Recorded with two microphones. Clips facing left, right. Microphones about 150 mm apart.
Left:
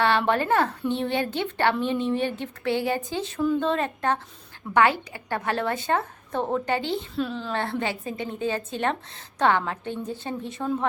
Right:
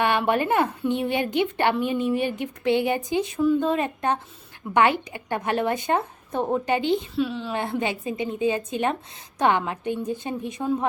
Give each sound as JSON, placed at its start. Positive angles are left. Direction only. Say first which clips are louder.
{"t": 0.0, "sound": "a woman's voice", "louder": "even", "side_deg": -15}
{"t": 7.2, "sound": "a woman's voice", "louder": "right 3 dB", "side_deg": -5}
{"t": 7.5, "sound": "a woman's voice", "louder": "right 1 dB", "side_deg": -15}